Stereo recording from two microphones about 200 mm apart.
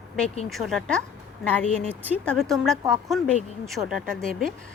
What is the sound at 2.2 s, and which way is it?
A woman's voice, 5° left (ahead or behind).